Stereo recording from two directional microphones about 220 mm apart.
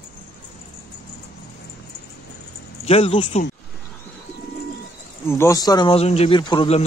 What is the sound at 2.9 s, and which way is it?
Speech, 25° left (ahead or behind).